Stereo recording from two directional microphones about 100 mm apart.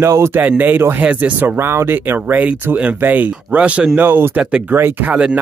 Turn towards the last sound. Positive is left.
turn(degrees=-15)  # may be behind; listen again after turning